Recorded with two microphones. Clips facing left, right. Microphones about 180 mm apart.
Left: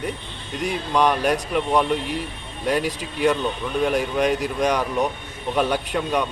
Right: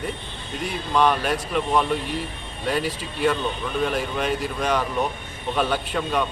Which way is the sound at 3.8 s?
15° left (ahead or behind).